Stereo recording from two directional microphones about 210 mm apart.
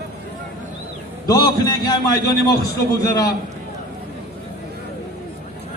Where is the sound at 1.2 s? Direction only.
15° left (ahead or behind).